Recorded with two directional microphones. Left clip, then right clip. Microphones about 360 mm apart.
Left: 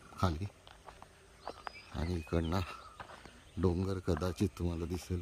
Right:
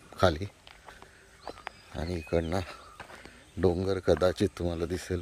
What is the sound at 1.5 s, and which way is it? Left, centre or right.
Wild animals, right.